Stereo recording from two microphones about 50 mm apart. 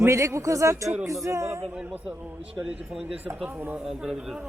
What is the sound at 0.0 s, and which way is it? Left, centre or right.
Speech, right.